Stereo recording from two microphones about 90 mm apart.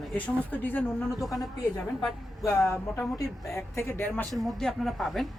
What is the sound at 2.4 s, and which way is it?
Speech, 30° left (ahead or behind).